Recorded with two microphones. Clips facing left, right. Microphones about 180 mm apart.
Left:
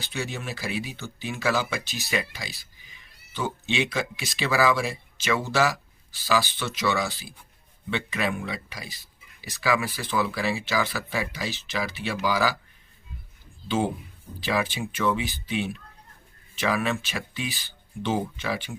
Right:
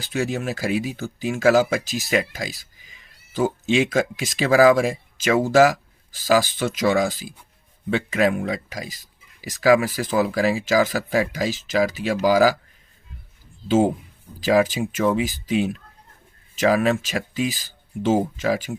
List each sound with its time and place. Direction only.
0.0 s speech: 45° right (ahead or behind)
13.7 s speech: 45° right (ahead or behind)